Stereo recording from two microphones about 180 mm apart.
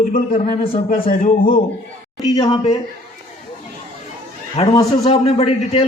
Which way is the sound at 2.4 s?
35° left (ahead or behind).